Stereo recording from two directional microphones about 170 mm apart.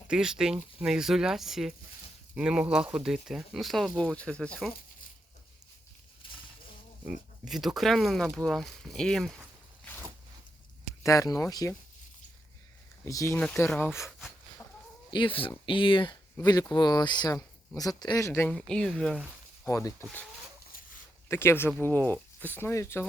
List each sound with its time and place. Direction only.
0.1 s speech: 5° right (ahead or behind)
6.2 s a sound: 30° left (ahead or behind)
7.0 s speech: 5° right (ahead or behind)
8.4 s a sound: centre (ahead or behind)
11.0 s speech: 20° left (ahead or behind)
13.1 s speech: 20° left (ahead or behind)
15.1 s speech: 30° left (ahead or behind); by 19.2 s 5° left (ahead or behind)
19.6 s speech: 15° left (ahead or behind)
21.2 s speech: 15° left (ahead or behind)